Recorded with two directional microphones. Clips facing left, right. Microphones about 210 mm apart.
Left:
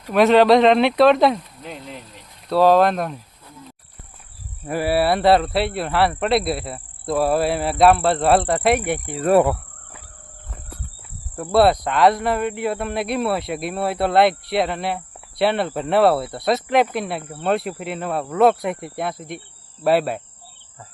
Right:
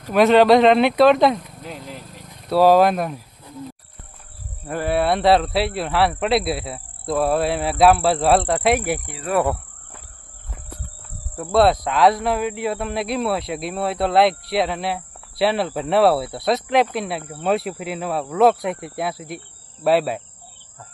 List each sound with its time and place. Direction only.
0.1 s speech: centre (ahead or behind)
4.6 s speech: 5° left (ahead or behind)
9.3 s speech: 45° left (ahead or behind)
11.3 s speech: centre (ahead or behind)